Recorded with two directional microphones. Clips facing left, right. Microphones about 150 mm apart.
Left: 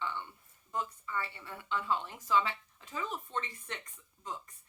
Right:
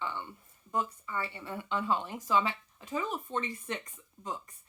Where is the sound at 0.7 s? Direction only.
15° right (ahead or behind).